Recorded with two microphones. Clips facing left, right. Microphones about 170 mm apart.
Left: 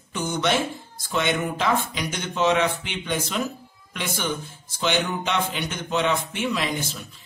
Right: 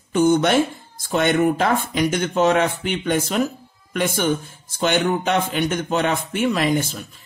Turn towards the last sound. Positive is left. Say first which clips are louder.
# right 7 dB
turn(degrees=-50)  # may be behind; listen again after turning